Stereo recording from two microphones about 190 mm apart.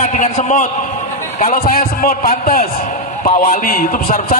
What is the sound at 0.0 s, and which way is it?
A man's voice, 40° left (ahead or behind).